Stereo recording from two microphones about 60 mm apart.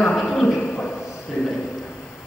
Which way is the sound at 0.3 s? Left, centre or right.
Centre.